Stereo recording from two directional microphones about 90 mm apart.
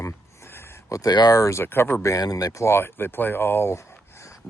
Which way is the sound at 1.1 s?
45° left (ahead or behind).